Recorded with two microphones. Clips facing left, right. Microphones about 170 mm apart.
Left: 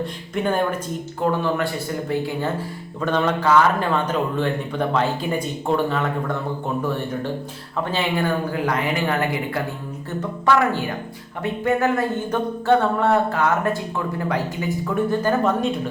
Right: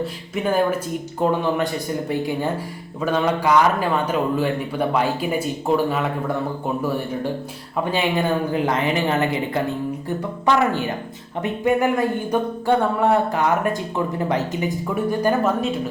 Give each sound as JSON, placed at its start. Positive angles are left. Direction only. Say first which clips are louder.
{"t": 0.0, "sound": "speech", "louder": "even", "side_deg": -5}
{"t": 1.2, "sound": "a man's voice", "louder": "right 1 dB", "side_deg": -20}
{"t": 7.9, "sound": "a man's voice", "louder": "right 2 dB", "side_deg": -15}